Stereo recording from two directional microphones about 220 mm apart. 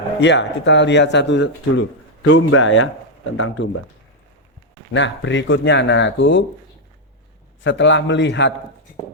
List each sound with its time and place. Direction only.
0.2 s speech: 55° left (ahead or behind)
4.9 s speech: 55° left (ahead or behind)
7.6 s speech: 55° left (ahead or behind)